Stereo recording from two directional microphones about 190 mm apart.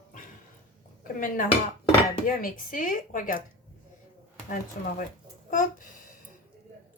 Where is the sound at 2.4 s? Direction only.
45° left (ahead or behind).